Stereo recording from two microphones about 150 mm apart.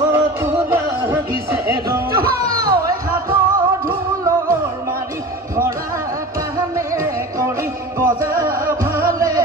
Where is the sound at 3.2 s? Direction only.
70° right (ahead or behind).